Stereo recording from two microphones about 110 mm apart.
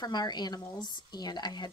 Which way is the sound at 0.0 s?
40° left (ahead or behind).